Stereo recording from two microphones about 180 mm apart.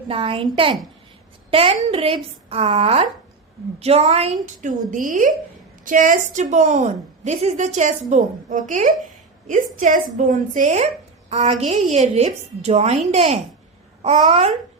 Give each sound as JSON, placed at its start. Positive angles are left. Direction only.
{"t": 0.1, "sound": "a woman's voice", "side_deg": -30}
{"t": 4.6, "sound": "a woman's voice", "side_deg": -45}